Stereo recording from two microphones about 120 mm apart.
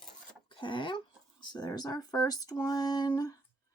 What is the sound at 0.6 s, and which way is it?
Speech, 45° left (ahead or behind).